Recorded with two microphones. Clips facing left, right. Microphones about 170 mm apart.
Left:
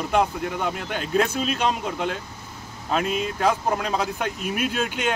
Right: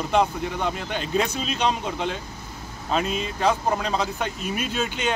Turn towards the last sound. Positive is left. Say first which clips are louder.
# left 1 dB
turn(degrees=5)  # may be behind; listen again after turning